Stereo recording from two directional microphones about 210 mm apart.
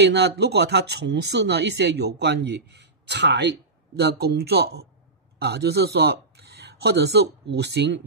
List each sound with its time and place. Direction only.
0.0 s speech: 55° right (ahead or behind)